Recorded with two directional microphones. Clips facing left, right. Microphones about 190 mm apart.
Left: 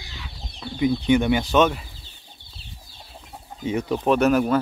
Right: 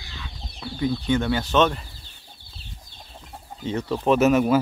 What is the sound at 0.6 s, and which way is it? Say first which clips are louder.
Chicken: left 1 dB; 25° left (ahead or behind).